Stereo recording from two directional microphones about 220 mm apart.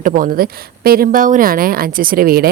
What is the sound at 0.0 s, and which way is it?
A woman's voice, 40° right (ahead or behind).